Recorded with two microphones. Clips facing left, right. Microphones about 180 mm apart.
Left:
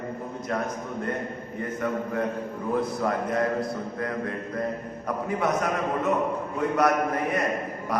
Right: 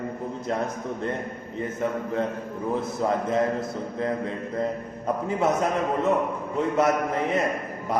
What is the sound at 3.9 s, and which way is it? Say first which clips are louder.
Speech: right 5 dB; 25° right (ahead or behind).